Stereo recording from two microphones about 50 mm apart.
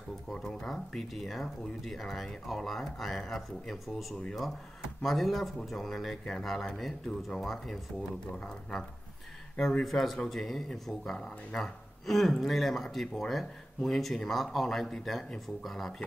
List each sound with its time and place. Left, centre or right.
0.3 s speech: centre
8.3 s speech: left
9.6 s speech: centre